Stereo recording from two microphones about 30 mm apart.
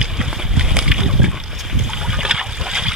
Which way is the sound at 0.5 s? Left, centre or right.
Right.